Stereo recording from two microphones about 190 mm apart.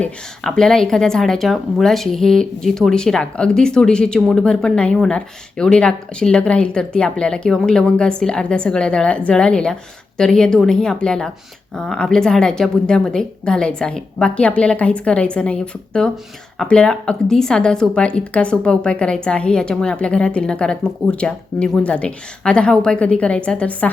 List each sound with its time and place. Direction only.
0.0 s a woman's voice: 5° left (ahead or behind)